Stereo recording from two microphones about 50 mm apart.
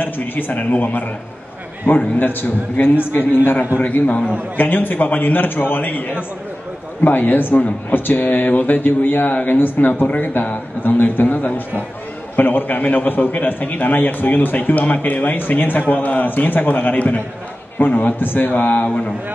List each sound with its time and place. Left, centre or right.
0.0 s a man's voice: left
3.8 s a man's voice: left